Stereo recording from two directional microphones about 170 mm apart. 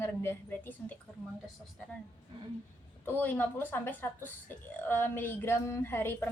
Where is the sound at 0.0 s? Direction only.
15° left (ahead or behind).